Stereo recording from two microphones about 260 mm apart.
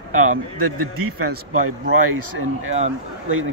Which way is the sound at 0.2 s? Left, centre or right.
Right.